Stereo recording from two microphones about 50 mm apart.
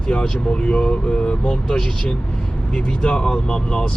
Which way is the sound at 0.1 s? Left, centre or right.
Centre.